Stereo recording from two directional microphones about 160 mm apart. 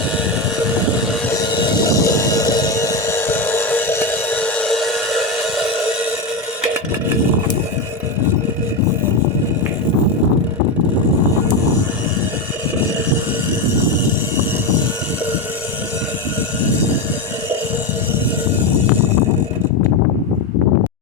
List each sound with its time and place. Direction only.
1.4 s music: 25° left (ahead or behind); by 5.2 s centre (ahead or behind)